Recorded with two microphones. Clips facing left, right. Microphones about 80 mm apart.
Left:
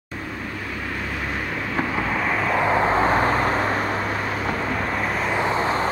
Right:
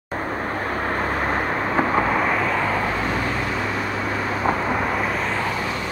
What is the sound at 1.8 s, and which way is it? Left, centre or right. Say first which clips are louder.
Vehicle: right 4 dB; right.